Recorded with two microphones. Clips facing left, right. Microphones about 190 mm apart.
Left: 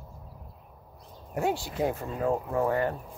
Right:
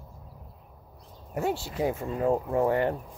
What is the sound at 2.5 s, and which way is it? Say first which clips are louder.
Speech: right 2 dB; 25° right (ahead or behind).